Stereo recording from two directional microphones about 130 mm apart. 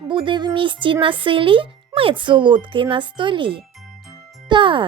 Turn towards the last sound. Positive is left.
turn(degrees=-40)  # may be behind; listen again after turning